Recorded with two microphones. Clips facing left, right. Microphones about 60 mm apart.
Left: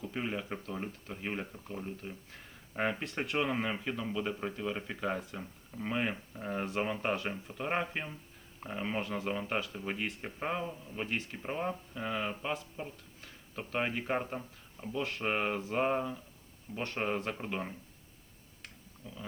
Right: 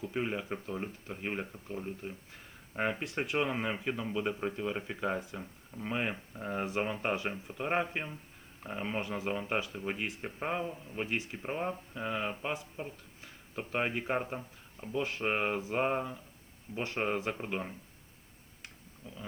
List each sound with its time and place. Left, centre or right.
0.0 s speech: centre
18.6 s clicking: centre